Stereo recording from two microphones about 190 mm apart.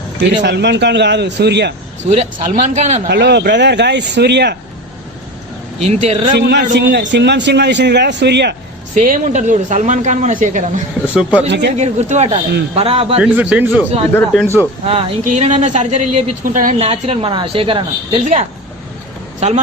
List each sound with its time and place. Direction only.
0.4 s speech: 65° right (ahead or behind)
2.0 s a woman's voice: 40° right (ahead or behind)
3.1 s speech: 60° right (ahead or behind)
5.9 s a woman's voice: 35° right (ahead or behind)
6.4 s speech: 60° right (ahead or behind)
9.0 s a woman's voice: 40° right (ahead or behind)
11.1 s speech: 5° right (ahead or behind)
11.8 s a woman's voice: 35° right (ahead or behind)
13.1 s a man's voice: 5° right (ahead or behind)
14.1 s speech: 10° left (ahead or behind)
14.8 s a woman's voice: 30° right (ahead or behind)